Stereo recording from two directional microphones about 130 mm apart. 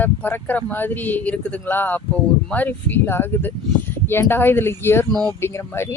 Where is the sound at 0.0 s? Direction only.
15° left (ahead or behind).